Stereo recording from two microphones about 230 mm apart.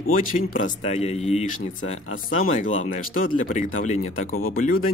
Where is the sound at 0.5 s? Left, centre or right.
Left.